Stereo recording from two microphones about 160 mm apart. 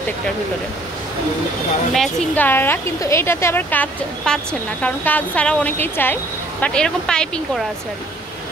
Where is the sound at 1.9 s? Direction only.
5° left (ahead or behind).